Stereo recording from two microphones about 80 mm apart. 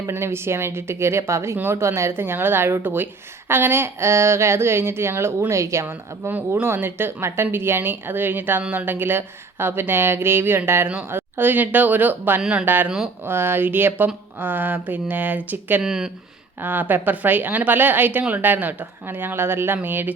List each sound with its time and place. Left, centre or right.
0.1 s a woman's voice: right
5.8 s a woman's voice: right
12.4 s speech: centre
12.6 s a woman's voice: right
15.8 s speech: centre
16.6 s a woman's voice: right